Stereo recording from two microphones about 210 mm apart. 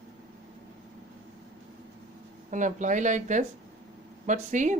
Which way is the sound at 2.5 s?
35° right (ahead or behind).